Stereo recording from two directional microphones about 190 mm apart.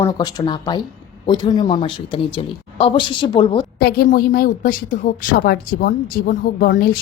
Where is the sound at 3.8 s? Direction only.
55° left (ahead or behind).